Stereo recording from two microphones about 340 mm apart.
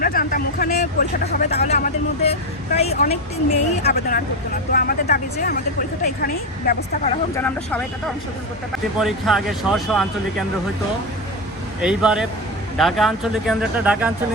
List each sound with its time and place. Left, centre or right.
0.0 s speech: left
7.3 s speech: centre
9.0 s speech: centre
11.8 s speech: centre